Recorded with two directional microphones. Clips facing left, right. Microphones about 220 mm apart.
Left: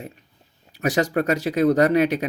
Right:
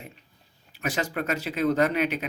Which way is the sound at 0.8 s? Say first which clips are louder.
Left 8 dB; 40° left (ahead or behind).